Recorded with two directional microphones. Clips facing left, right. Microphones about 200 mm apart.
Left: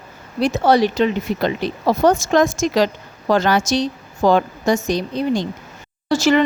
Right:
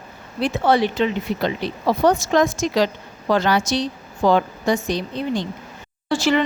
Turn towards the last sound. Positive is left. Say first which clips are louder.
# left 3 dB
turn(degrees=45)  # may be behind; listen again after turning